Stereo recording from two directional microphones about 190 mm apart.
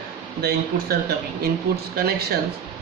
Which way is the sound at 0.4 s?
60° right (ahead or behind).